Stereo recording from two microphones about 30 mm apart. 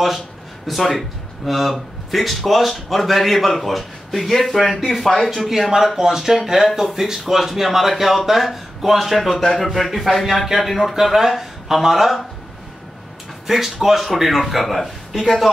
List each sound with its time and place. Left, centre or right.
0.7 s speech: centre
5.5 s speech: centre
9.3 s speech: centre
13.5 s speech: centre